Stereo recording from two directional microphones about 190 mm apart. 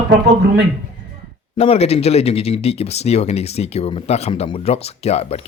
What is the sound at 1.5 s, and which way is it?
Speech, 35° left (ahead or behind).